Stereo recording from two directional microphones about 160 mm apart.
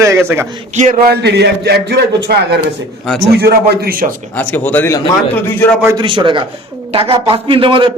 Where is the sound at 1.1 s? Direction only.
90° right.